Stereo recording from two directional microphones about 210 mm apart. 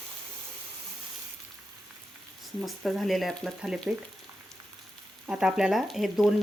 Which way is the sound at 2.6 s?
Centre (ahead or behind).